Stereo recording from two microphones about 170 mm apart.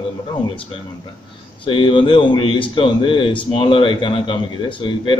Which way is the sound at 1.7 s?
30° left (ahead or behind).